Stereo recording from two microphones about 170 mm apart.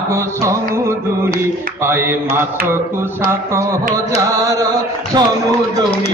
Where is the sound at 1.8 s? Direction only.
15° right (ahead or behind).